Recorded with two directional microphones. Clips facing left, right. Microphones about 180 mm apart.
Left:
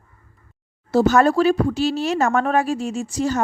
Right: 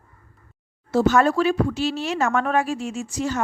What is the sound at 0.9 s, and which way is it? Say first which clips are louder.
A woman's voice: left 2 dB; 40° left (ahead or behind).